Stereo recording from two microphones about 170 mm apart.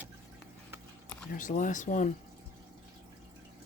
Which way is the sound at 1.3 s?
50° left (ahead or behind).